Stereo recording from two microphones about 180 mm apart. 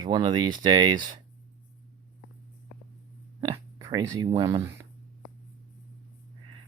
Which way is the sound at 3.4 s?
20° right (ahead or behind).